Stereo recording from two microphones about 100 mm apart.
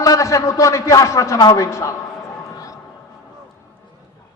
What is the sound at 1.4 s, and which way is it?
Speech, 45° left (ahead or behind).